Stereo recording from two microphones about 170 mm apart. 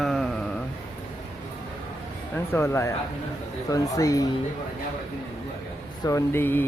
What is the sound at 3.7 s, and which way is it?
Speech, 20° left (ahead or behind).